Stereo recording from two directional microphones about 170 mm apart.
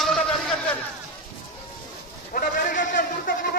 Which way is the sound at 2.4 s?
50° left (ahead or behind).